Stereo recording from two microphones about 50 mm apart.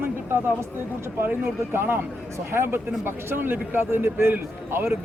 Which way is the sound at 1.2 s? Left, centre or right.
Right.